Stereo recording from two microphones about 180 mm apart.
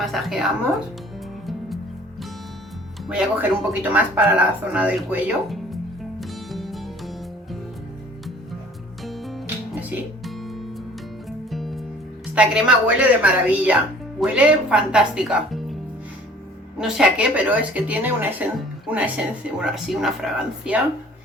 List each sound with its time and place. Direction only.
0.0 s speech: centre (ahead or behind)
3.7 s music: 10° right (ahead or behind)
9.0 s music: centre (ahead or behind)
12.3 s speech: 5° right (ahead or behind)